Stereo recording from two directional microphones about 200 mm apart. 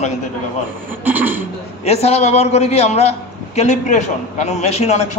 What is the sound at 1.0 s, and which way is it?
Speech, 10° right (ahead or behind).